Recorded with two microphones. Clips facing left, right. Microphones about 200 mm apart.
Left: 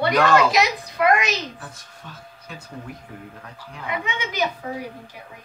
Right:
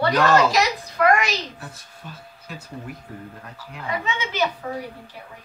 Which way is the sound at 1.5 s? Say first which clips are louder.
Even; 5° right (ahead or behind).